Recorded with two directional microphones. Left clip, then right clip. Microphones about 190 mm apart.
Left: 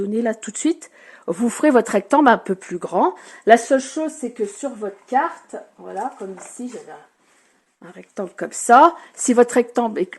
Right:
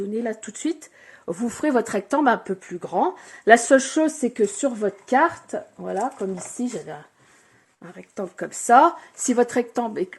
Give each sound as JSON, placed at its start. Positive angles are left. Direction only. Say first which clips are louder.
{"t": 0.0, "sound": "speech", "louder": "left 5 dB", "side_deg": 30}
{"t": 3.9, "sound": "speech", "louder": "right 3 dB", "side_deg": -45}
{"t": 7.9, "sound": "speech", "louder": "left 3 dB", "side_deg": 15}